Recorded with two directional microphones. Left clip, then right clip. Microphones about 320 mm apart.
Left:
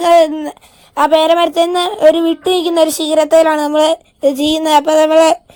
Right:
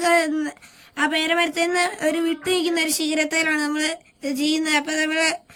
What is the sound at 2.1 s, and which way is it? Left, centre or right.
Speech, left.